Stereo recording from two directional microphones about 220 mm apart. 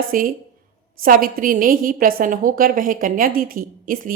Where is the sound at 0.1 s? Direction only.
40° right (ahead or behind).